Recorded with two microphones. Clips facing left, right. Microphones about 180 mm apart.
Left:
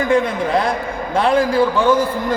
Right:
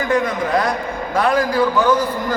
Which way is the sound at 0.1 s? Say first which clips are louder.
Even; 25° left (ahead or behind).